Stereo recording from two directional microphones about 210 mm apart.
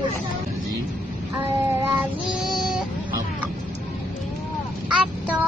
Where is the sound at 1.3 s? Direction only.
10° right (ahead or behind).